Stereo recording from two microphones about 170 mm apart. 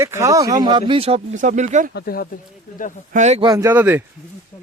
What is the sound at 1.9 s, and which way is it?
Speech, 60° left (ahead or behind).